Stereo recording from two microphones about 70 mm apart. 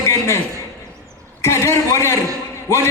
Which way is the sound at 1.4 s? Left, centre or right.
Left.